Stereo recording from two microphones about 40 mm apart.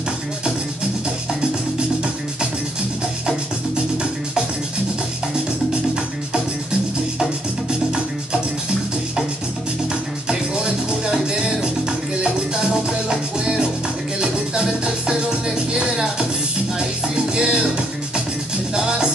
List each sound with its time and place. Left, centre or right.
10.5 s music: centre
13.1 s music: right
18.8 s music: centre